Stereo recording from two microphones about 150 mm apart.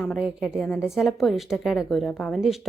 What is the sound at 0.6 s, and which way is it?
Speech, 10° left (ahead or behind).